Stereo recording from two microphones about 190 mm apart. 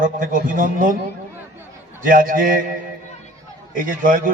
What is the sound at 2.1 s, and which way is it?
Speech, 45° right (ahead or behind).